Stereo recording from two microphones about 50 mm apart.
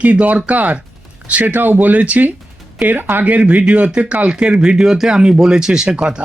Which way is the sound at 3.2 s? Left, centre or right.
Right.